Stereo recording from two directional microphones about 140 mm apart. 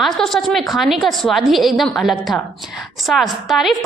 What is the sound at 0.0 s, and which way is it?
A woman's voice, centre (ahead or behind).